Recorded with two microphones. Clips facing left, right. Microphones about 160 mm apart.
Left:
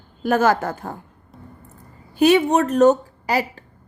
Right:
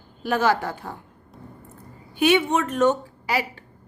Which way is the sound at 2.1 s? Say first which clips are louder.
Left 4 dB; 40° left (ahead or behind).